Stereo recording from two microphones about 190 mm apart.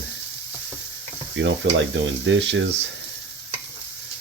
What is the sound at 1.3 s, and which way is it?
Speech, 75° right (ahead or behind).